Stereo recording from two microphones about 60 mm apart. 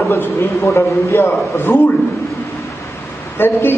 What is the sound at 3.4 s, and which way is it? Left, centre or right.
Speech, left.